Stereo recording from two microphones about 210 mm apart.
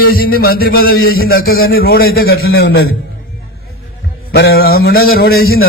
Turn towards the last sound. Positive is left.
turn(degrees=45)  # may be behind; listen again after turning